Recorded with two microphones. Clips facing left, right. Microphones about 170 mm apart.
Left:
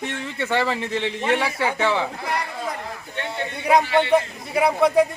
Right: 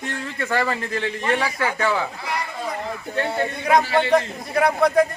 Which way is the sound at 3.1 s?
40° right (ahead or behind).